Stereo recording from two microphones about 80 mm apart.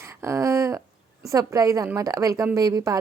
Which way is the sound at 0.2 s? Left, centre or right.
Right.